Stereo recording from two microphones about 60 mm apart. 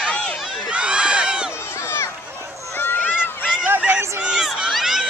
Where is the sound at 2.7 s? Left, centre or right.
Left.